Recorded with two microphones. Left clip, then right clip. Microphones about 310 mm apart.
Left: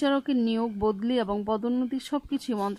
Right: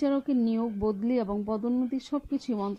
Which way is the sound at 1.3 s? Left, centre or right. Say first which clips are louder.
Left 3 dB; left.